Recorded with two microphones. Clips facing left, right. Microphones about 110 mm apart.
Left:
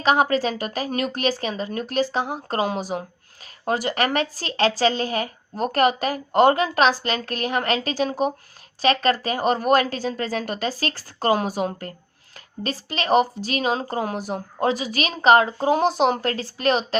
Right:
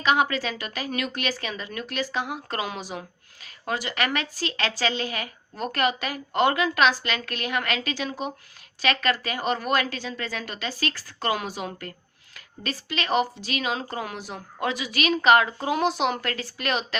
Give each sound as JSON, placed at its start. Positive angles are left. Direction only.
{"t": 0.0, "sound": "speech", "side_deg": 35}